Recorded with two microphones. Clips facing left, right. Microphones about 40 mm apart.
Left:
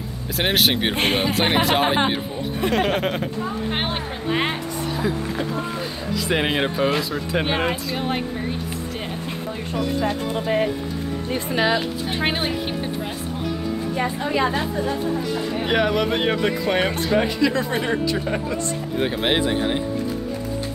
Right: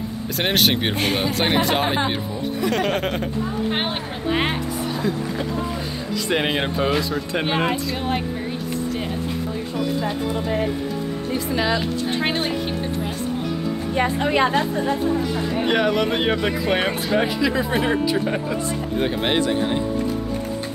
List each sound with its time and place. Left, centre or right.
0.4 s speech: centre
0.9 s speech: left
1.2 s speech: centre
6.2 s speech: centre
11.5 s speech: centre
13.9 s a woman's voice: right
15.6 s speech: centre